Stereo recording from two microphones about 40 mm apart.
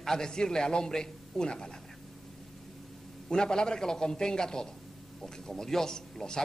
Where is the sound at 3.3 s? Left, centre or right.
Centre.